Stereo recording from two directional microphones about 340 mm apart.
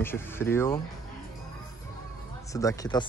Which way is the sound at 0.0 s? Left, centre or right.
Centre.